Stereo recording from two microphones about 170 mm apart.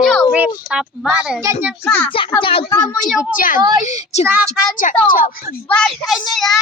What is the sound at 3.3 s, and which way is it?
Speech, 55° left (ahead or behind).